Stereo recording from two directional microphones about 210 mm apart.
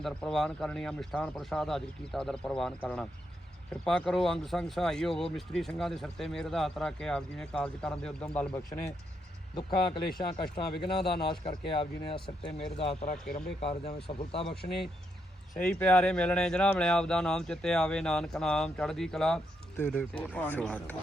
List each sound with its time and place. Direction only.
0.0 s speech: centre (ahead or behind)
9.6 s speech: 20° left (ahead or behind)
11.0 s speech: 25° left (ahead or behind)
15.5 s speech: 5° left (ahead or behind)